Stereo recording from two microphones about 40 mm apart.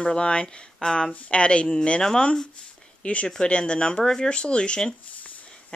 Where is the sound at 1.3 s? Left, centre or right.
Left.